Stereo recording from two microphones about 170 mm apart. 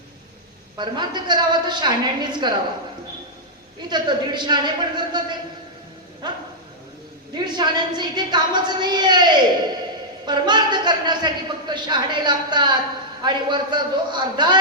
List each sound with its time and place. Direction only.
0.8 s a man's voice: 25° right (ahead or behind)
3.8 s a man's voice: 25° right (ahead or behind)
7.3 s a man's voice: 25° right (ahead or behind)